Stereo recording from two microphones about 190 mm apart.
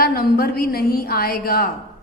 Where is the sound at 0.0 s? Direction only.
50° left (ahead or behind).